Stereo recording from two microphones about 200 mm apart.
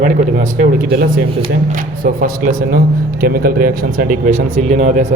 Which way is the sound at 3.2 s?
45° right (ahead or behind).